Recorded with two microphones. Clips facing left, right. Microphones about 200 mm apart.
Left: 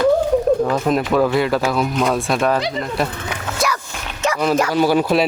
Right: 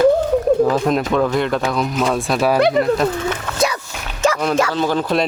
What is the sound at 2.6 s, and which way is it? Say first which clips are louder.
Speech: right 8 dB; 60° right (ahead or behind).